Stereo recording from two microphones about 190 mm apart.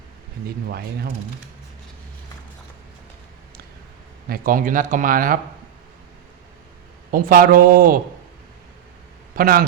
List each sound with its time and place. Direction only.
4.3 s speech: 45° right (ahead or behind)
7.1 s speech: 45° right (ahead or behind)
9.3 s speech: 50° right (ahead or behind)